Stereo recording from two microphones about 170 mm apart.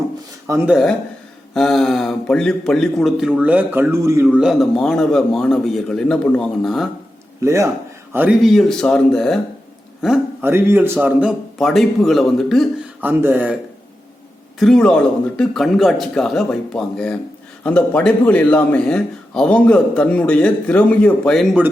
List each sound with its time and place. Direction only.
0.4 s speech: 15° right (ahead or behind)
0.7 s speech: centre (ahead or behind); by 4.3 s 15° right (ahead or behind)
4.4 s speech: centre (ahead or behind)
7.4 s speech: 15° right (ahead or behind); by 9.4 s 5° left (ahead or behind)
10.4 s speech: 15° right (ahead or behind)
13.0 s speech: 10° right (ahead or behind)
14.6 s a man's voice: 5° left (ahead or behind)